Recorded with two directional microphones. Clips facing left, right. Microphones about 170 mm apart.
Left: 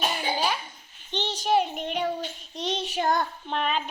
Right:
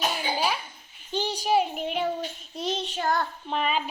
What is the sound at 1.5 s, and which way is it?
Child singing, 5° right (ahead or behind).